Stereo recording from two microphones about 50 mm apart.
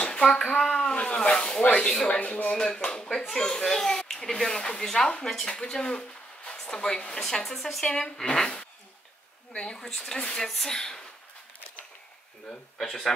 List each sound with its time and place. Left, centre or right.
0.2 s speech: centre
0.6 s a sound: centre
0.9 s speech: centre
2.1 s speech: left
2.5 s speech: centre
12.4 s speech: centre